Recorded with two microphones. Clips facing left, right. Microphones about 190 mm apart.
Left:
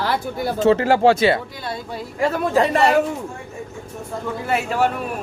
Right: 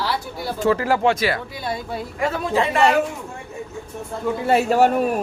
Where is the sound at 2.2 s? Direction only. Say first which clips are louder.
Left 3 dB; 40° left (ahead or behind).